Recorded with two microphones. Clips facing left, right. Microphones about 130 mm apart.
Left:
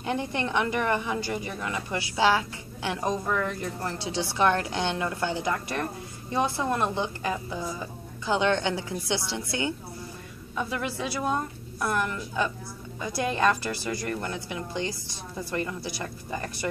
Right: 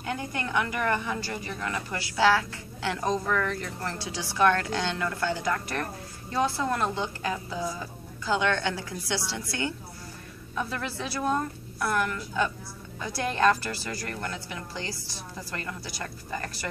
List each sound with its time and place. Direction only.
0.0 s a woman's voice: 25° left (ahead or behind)